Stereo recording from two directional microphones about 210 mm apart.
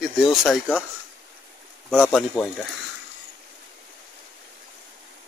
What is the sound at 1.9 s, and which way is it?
Speech, 5° left (ahead or behind).